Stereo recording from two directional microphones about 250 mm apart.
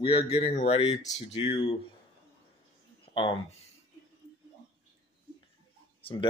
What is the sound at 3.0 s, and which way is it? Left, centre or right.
Speech, centre.